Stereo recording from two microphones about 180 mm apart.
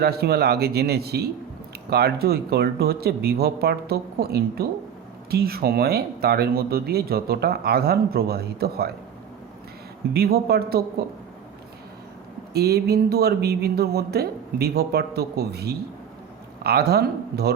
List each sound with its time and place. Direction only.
0.0 s speech: 60° right (ahead or behind)
10.1 s speech: 60° right (ahead or behind)
12.5 s speech: 60° right (ahead or behind)